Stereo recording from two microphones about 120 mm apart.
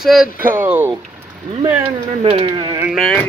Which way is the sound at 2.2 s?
50° right (ahead or behind).